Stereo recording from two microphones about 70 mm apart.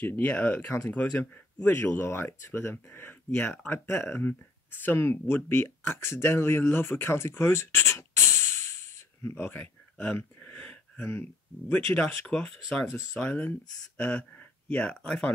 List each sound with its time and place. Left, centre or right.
0.0 s speech: centre
1.8 s speech: left
9.9 s a sound: centre
11.7 s speech: left
12.4 s speech: centre